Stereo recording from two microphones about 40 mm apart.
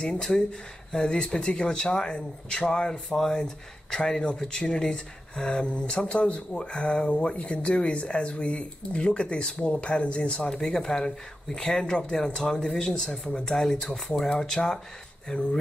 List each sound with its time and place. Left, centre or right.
0.2 s speech: centre
1.0 s speech: left